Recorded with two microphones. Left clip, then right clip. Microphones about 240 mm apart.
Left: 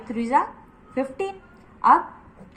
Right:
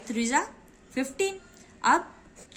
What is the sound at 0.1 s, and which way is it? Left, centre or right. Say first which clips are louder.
A woman's voice: left 6 dB; right.